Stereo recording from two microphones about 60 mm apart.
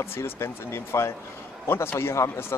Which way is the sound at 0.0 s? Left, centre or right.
Left.